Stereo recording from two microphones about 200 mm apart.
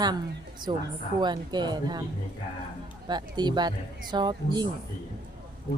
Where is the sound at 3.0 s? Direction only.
20° right (ahead or behind).